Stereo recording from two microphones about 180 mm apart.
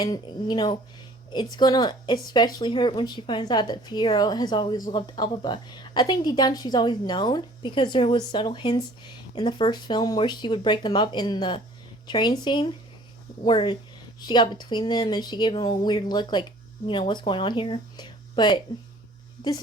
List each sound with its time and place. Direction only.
0.0 s speech: 20° left (ahead or behind)